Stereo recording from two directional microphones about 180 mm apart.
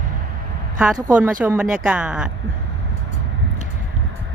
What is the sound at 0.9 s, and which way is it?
Speech, 20° right (ahead or behind).